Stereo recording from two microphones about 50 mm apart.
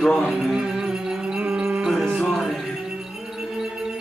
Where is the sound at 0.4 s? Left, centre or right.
Centre.